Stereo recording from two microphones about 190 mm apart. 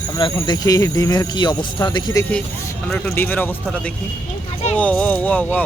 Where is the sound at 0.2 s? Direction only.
25° left (ahead or behind).